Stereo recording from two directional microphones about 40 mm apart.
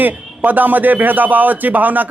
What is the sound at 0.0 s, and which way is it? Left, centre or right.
A man's voice, right.